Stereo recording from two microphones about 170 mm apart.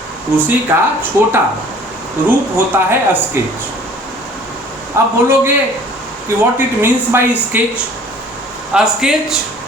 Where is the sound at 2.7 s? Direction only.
10° right (ahead or behind).